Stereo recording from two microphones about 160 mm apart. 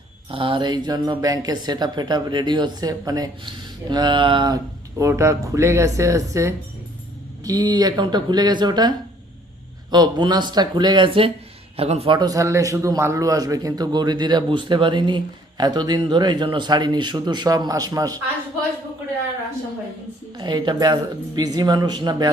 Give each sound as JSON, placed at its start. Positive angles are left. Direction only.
{"t": 0.3, "sound": "a man's voice", "side_deg": -35}
{"t": 20.3, "sound": "a man's voice", "side_deg": -25}